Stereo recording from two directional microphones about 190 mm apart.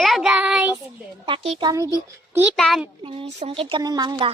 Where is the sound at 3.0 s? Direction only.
30° right (ahead or behind).